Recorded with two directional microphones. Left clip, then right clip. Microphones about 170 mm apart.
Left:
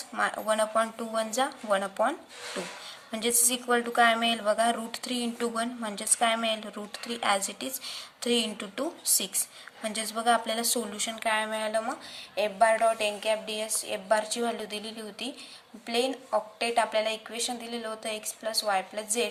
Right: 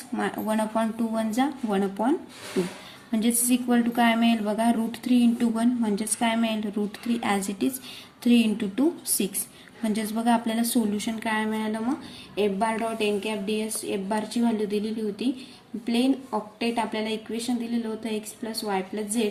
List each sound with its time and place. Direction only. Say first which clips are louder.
0.2 s a woman's voice: left 1 dB; 20° left (ahead or behind)
7.2 s a woman's voice: even; 15° left (ahead or behind)